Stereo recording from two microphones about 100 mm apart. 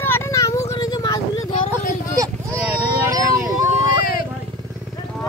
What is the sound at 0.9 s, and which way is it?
Vehicle, 45° left (ahead or behind).